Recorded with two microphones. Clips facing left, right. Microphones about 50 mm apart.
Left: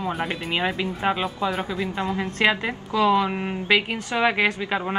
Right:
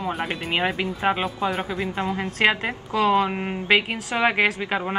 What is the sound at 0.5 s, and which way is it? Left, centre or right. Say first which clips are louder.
Speech: right 1 dB; right.